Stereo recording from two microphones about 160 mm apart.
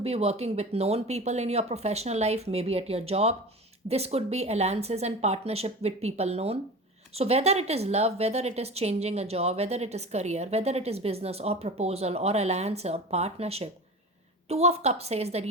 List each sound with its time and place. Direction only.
0.0 s a woman's voice: 40° right (ahead or behind)